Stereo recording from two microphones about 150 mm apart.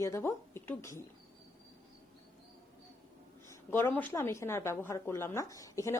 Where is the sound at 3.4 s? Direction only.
15° left (ahead or behind).